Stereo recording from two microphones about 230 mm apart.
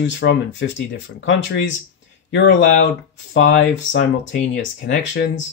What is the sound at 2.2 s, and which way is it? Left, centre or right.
Speech, left.